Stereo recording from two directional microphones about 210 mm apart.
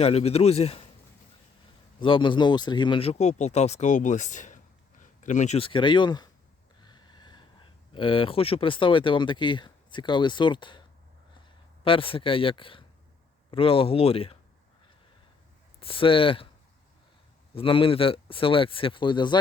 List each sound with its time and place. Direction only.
0.0 s speech: 30° left (ahead or behind)
2.0 s speech: 25° left (ahead or behind)
6.8 s snort: 20° left (ahead or behind)
7.9 s speech: 25° left (ahead or behind)
15.8 s speech: 25° left (ahead or behind)
17.5 s speech: 25° left (ahead or behind)